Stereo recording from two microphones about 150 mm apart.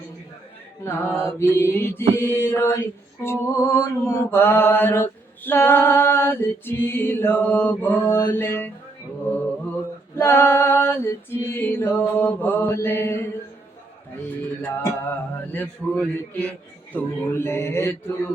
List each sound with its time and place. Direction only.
0.9 s mantra: 15° left (ahead or behind)
10.2 s mantra: 15° left (ahead or behind)
14.6 s mantra: 15° left (ahead or behind)